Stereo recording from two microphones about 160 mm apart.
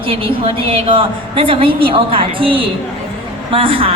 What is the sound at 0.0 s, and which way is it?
A woman's voice, 35° right (ahead or behind).